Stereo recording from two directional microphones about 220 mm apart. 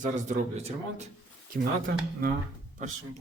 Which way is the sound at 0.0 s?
30° right (ahead or behind).